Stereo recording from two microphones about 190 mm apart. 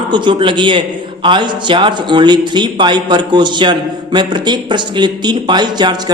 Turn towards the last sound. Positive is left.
turn(degrees=-25)  # may be behind; listen again after turning